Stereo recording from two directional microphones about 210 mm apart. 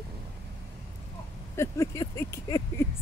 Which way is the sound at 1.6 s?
15° left (ahead or behind).